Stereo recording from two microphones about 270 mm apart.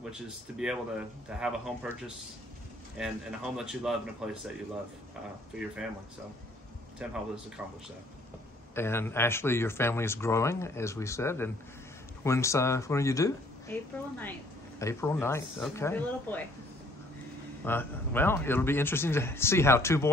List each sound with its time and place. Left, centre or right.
0.6 s speech: centre
3.0 s speech: centre
7.0 s speech: centre
8.7 s speech: centre
17.6 s speech: centre